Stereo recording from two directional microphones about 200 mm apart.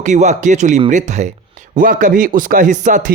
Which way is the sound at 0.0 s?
35° right (ahead or behind).